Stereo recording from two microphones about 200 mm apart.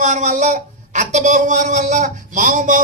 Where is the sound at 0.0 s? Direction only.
35° right (ahead or behind).